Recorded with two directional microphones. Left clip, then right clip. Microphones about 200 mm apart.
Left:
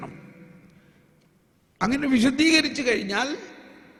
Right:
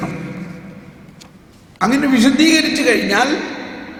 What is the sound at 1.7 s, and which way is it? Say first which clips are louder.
A man's voice: right 9 dB; 40° left (ahead or behind).